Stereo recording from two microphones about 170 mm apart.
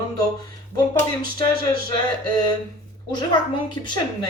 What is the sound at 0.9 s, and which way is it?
Speech, 20° left (ahead or behind).